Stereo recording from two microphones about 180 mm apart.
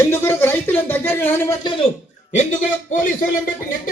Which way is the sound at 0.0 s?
15° left (ahead or behind).